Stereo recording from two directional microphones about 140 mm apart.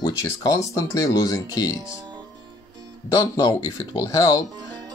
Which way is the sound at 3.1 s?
30° left (ahead or behind).